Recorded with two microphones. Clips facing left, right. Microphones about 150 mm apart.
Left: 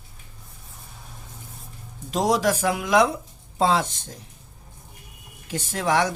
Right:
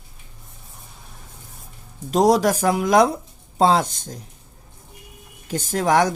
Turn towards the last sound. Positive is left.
turn(degrees=-40)  # may be behind; listen again after turning